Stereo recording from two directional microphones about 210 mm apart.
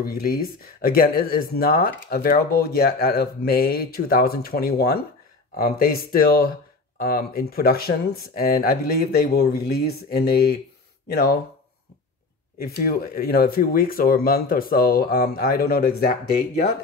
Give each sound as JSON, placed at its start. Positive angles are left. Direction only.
{"t": 0.0, "sound": "speech", "side_deg": 45}
{"t": 12.5, "sound": "speech", "side_deg": 45}